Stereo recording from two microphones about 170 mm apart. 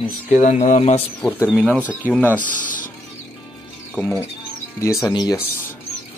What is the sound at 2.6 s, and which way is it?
Insect, 50° left (ahead or behind).